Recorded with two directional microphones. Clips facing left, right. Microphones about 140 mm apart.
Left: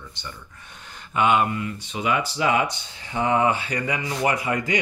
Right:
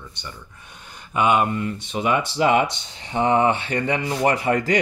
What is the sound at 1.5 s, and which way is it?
Speech, 35° right (ahead or behind).